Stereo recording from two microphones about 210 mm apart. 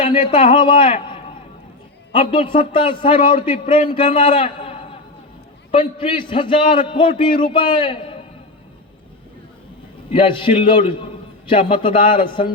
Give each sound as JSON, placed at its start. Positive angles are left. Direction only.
{"t": 0.0, "sound": "a man's voice", "side_deg": 25}
{"t": 10.1, "sound": "a man's voice", "side_deg": 25}
{"t": 11.9, "sound": "a man's voice", "side_deg": 40}
{"t": 12.2, "sound": "a man's voice", "side_deg": 25}